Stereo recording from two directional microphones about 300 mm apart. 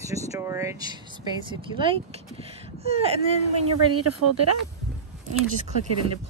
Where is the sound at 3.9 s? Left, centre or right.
Right.